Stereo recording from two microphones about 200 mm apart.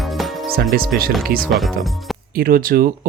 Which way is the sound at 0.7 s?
50° right (ahead or behind).